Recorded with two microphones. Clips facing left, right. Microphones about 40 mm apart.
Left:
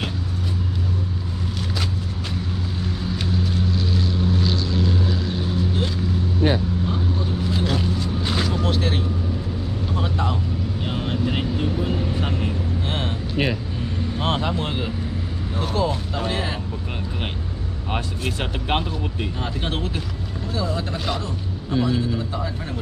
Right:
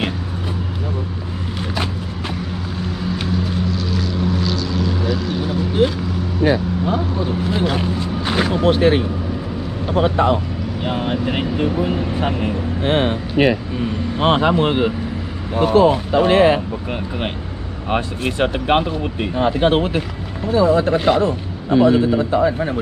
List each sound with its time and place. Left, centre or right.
6.9 s vehicle: right
10.9 s speech: right
16.3 s speech: right
17.8 s speech: right